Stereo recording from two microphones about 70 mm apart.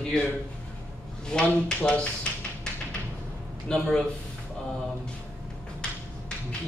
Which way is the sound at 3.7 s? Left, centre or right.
Centre.